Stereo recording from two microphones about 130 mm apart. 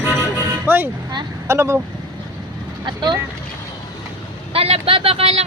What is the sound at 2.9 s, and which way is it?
Speech, 35° right (ahead or behind).